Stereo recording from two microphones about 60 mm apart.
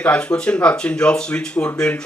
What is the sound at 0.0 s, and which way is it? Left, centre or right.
Speech, centre.